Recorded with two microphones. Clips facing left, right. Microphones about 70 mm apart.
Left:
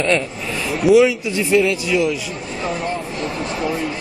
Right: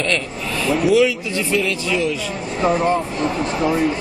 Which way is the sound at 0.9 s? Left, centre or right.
Centre.